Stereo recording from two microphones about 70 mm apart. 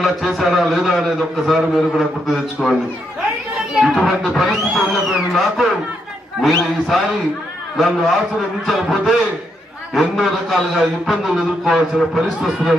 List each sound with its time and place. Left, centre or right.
0.0 s a man's voice: centre
3.8 s a man's voice: centre